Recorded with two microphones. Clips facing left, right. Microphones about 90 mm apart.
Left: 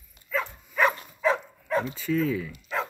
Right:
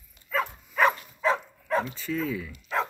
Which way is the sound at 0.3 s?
5° right (ahead or behind).